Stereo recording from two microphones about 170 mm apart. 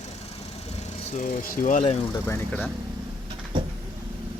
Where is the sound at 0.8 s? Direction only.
50° left (ahead or behind).